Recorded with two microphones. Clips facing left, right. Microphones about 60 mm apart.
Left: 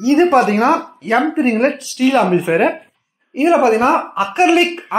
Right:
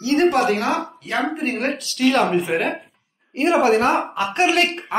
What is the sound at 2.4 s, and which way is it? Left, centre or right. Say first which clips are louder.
Speech: left 8 dB; left.